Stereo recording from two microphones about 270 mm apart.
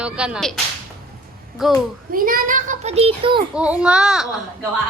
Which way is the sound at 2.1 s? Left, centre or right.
Right.